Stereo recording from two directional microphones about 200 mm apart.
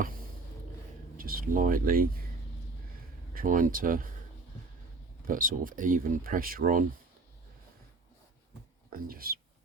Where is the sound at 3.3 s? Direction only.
45° right (ahead or behind).